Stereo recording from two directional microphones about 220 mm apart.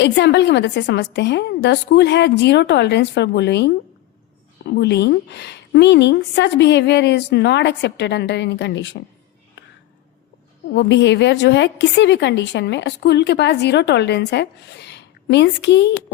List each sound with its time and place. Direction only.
0.0 s a woman's voice: 50° left (ahead or behind)
4.7 s a woman's voice: 50° left (ahead or behind)
10.8 s a woman's voice: 55° left (ahead or behind)